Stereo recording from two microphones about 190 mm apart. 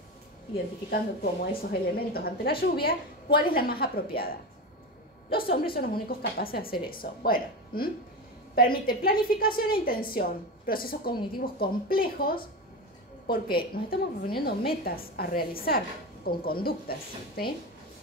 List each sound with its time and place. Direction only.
0.8 s a woman's voice: 55° left (ahead or behind)
5.3 s a woman's voice: 50° left (ahead or behind)
13.8 s a woman's voice: 50° left (ahead or behind)